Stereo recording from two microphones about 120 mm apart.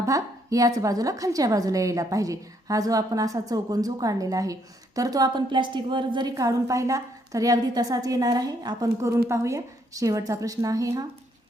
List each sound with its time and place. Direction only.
0.0 s a woman's voice: 30° right (ahead or behind)